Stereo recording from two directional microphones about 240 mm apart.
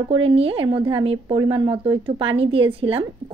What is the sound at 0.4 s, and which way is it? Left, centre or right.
A woman's voice, right.